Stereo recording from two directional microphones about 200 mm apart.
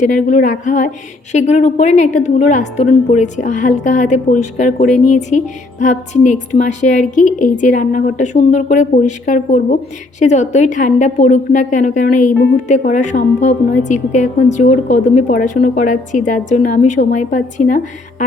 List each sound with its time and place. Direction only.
0.0 s a woman's voice: 40° left (ahead or behind)